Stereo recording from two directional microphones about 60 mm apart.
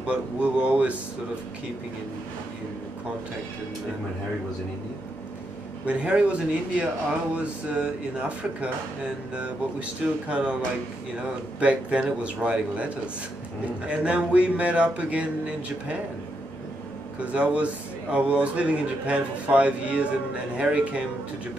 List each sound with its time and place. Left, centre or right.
0.0 s a man's voice: centre
5.9 s a man's voice: right
17.2 s a man's voice: centre